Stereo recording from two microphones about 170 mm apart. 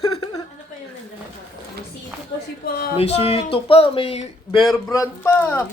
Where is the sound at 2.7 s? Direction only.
65° left (ahead or behind).